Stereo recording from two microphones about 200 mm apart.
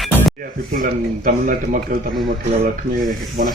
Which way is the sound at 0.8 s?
40° right (ahead or behind).